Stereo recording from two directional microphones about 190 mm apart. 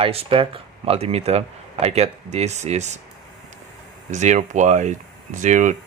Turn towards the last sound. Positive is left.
turn(degrees=-40)  # may be behind; listen again after turning